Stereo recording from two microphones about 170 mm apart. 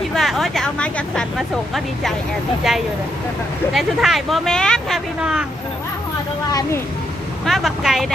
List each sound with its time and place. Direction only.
0.1 s speech: centre (ahead or behind)
6.5 s speech: 20° left (ahead or behind)
7.4 s speech: centre (ahead or behind)